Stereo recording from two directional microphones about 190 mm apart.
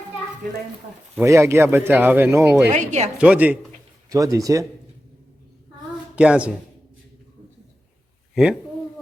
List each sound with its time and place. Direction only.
1.1 s speech: 15° right (ahead or behind)
2.7 s speech: 40° right (ahead or behind)
3.2 s speech: 5° right (ahead or behind)
6.1 s speech: 5° right (ahead or behind)